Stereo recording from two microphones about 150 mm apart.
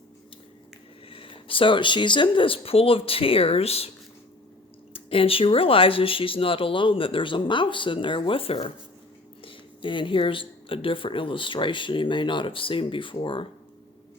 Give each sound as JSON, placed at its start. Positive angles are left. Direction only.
{"t": 1.1, "sound": "speech", "side_deg": 35}
{"t": 4.9, "sound": "speech", "side_deg": 35}